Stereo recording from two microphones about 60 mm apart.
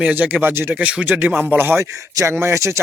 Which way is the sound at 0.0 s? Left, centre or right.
Right.